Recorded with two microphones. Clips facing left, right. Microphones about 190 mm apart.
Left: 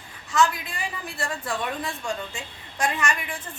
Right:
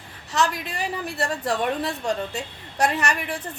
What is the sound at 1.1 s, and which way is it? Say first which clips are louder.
A woman's voice: right 5 dB; 35° right (ahead or behind).